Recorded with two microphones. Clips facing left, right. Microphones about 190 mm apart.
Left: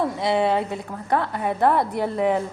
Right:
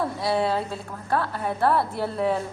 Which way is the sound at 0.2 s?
20° left (ahead or behind).